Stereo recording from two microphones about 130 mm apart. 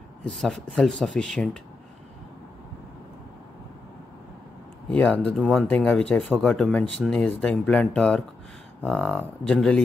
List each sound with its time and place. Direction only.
0.4 s speech: 5° left (ahead or behind)
4.9 s speech: 10° left (ahead or behind)